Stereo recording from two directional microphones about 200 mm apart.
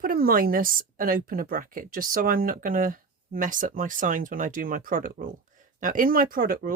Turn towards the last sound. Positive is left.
turn(degrees=-45)  # may be behind; listen again after turning